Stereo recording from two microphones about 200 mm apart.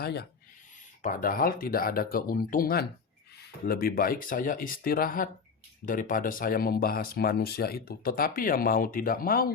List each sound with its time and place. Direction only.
0.0 s speech: 55° left (ahead or behind)